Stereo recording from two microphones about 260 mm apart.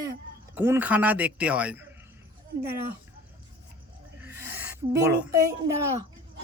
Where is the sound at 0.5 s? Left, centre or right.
Centre.